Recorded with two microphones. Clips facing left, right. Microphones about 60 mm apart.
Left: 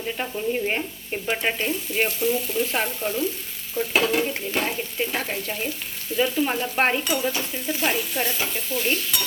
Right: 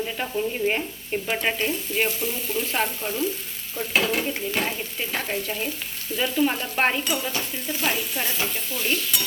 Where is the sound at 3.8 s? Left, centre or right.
Centre.